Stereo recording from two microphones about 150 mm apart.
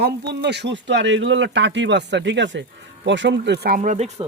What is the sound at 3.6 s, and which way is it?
Speech, 75° right (ahead or behind).